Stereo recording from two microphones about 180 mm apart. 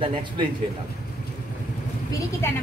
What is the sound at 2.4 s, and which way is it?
Speech, 15° left (ahead or behind).